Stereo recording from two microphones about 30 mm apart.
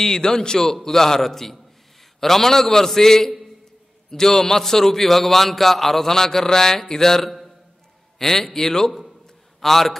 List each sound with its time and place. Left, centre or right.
0.0 s a man's voice: centre